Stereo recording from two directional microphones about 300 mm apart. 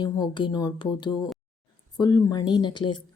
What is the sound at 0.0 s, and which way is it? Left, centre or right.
Speech, centre.